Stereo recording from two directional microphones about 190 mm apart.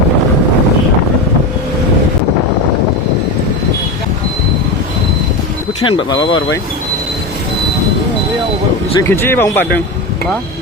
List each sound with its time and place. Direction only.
5.8 s speech: 25° left (ahead or behind)
9.0 s speech: 10° left (ahead or behind)